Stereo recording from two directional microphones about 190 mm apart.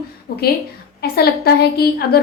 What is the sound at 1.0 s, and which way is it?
A woman's voice, 55° left (ahead or behind).